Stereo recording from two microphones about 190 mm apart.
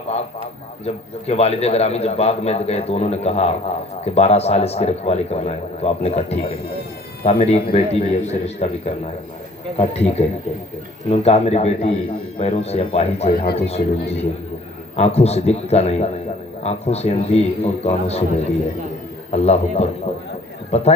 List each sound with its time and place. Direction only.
0.9 s a man's voice: 35° left (ahead or behind)
13.4 s a man's voice: 60° left (ahead or behind)
14.9 s a man's voice: 35° left (ahead or behind)
19.3 s a man's voice: 35° left (ahead or behind)